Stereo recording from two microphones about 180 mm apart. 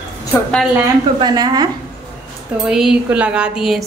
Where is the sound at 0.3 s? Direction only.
5° left (ahead or behind).